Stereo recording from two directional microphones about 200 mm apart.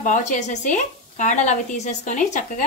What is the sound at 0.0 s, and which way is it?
Speech, 40° left (ahead or behind).